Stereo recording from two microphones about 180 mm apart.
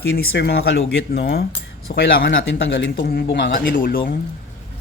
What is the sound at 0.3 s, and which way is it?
Speech, 65° left (ahead or behind).